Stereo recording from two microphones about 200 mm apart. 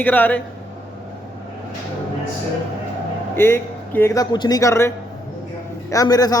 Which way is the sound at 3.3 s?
10° left (ahead or behind).